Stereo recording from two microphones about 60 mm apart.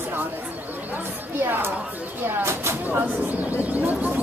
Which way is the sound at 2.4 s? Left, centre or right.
Right.